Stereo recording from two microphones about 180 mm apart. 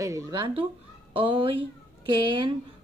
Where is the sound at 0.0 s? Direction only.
20° right (ahead or behind).